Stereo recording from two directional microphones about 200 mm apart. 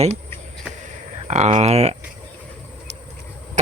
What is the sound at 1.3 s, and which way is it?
Speech, 35° right (ahead or behind).